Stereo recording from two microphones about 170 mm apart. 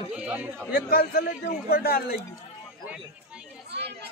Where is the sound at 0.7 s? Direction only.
60° left (ahead or behind).